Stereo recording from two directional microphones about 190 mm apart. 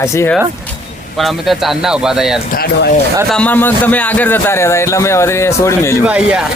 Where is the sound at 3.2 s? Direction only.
5° left (ahead or behind).